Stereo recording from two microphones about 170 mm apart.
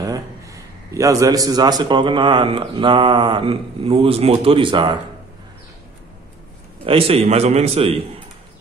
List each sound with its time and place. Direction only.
0.0 s a man's voice: 20° right (ahead or behind)
6.8 s a man's voice: 35° right (ahead or behind)